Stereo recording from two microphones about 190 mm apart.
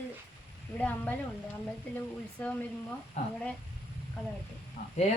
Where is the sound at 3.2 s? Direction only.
35° left (ahead or behind).